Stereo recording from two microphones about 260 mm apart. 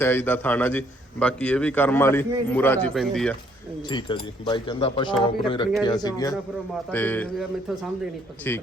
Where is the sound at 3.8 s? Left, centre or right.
Centre.